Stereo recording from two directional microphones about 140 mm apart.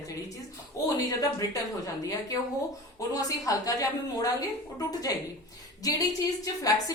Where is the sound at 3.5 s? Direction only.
25° left (ahead or behind).